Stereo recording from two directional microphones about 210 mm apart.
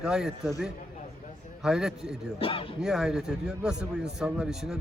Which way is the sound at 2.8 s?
5° right (ahead or behind).